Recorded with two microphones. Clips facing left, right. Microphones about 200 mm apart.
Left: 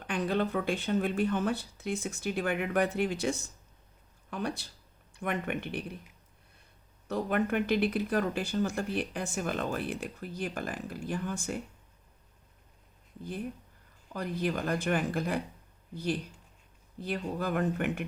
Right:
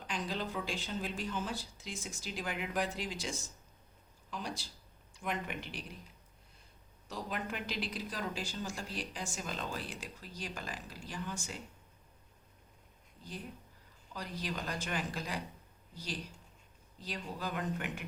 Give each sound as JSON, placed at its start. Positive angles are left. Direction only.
{"t": 0.1, "sound": "speech", "side_deg": 60}
{"t": 7.1, "sound": "speech", "side_deg": 60}
{"t": 14.1, "sound": "speech", "side_deg": 55}